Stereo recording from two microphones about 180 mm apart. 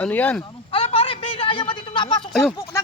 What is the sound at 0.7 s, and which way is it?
A man's voice, 30° left (ahead or behind).